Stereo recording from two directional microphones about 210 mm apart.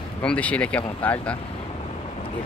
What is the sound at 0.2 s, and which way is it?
Speech, 5° left (ahead or behind).